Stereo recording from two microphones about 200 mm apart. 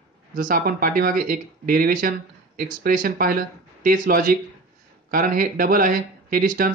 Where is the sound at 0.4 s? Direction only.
45° right (ahead or behind).